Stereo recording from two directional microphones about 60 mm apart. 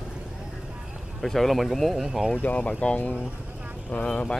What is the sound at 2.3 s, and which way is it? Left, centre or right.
Speech, left.